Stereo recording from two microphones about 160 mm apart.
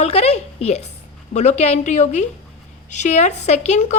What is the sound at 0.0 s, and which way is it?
A woman's voice, 40° left (ahead or behind).